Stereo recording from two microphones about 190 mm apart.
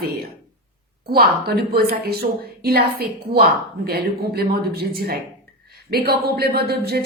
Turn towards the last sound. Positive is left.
turn(degrees=-55)  # may be behind; listen again after turning